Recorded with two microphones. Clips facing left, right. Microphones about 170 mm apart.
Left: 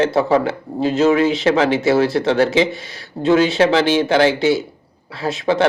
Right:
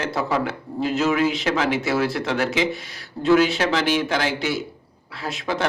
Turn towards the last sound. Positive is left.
turn(degrees=25)  # may be behind; listen again after turning